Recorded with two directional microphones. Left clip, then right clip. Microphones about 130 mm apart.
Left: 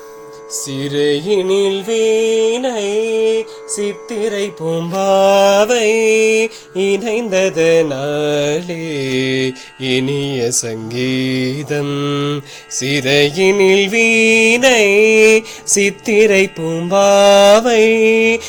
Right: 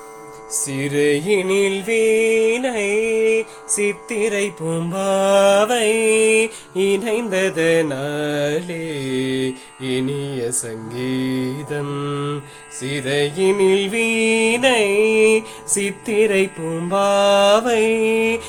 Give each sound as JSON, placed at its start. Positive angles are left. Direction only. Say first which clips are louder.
{"t": 0.5, "sound": "music", "louder": "left 2 dB", "side_deg": 15}
{"t": 4.9, "sound": "mantra", "louder": "left 5 dB", "side_deg": 15}
{"t": 8.8, "sound": "music", "louder": "left 5 dB", "side_deg": 55}
{"t": 12.8, "sound": "music", "louder": "left 7 dB", "side_deg": 50}
{"t": 13.6, "sound": "mantra", "louder": "left 6 dB", "side_deg": 35}